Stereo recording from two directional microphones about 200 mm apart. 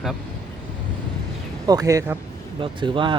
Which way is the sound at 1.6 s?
15° right (ahead or behind).